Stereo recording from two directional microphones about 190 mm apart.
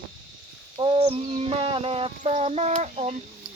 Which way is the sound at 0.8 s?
25° right (ahead or behind).